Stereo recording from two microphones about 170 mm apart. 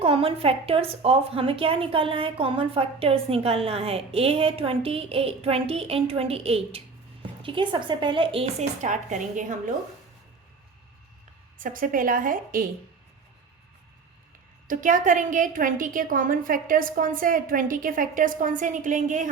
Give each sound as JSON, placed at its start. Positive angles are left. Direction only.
{"t": 0.0, "sound": "a woman's voice", "side_deg": -35}
{"t": 8.8, "sound": "a woman's voice", "side_deg": -45}
{"t": 11.5, "sound": "a woman's voice", "side_deg": -55}
{"t": 14.7, "sound": "a woman's voice", "side_deg": -50}